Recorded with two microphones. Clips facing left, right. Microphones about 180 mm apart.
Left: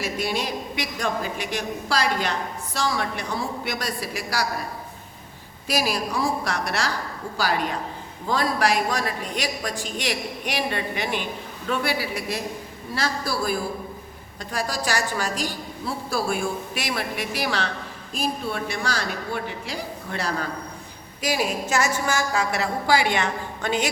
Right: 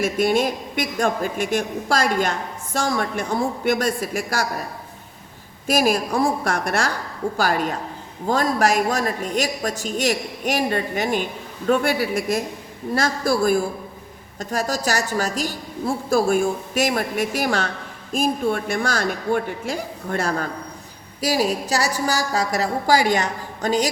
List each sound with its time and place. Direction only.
0.0 s a woman's voice: 50° right (ahead or behind)
5.6 s a woman's voice: 50° right (ahead or behind)